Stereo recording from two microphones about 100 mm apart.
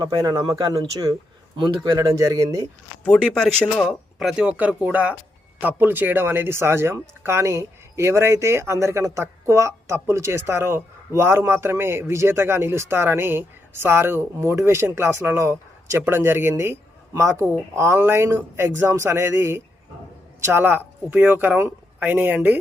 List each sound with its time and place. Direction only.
0.0 s speech: 40° right (ahead or behind)
3.0 s speech: 10° left (ahead or behind); by 22.5 s 20° right (ahead or behind)